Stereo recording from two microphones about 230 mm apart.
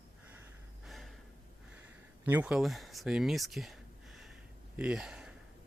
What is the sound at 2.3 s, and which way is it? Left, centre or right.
Speech, centre.